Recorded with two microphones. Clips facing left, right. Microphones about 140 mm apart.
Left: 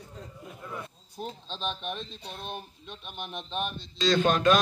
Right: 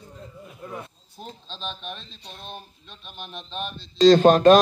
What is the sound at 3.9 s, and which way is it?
Speech, 40° right (ahead or behind).